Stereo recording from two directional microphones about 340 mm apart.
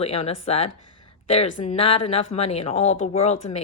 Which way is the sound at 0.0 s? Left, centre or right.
Centre.